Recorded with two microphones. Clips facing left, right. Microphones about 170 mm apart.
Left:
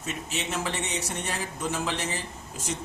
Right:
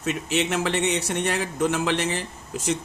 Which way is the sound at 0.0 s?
75° right (ahead or behind).